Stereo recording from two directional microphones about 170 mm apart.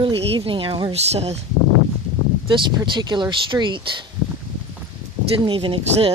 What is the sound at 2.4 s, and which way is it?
Speech, 30° right (ahead or behind).